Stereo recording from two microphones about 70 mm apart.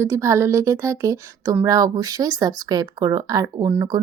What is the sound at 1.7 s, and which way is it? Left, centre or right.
Speech, right.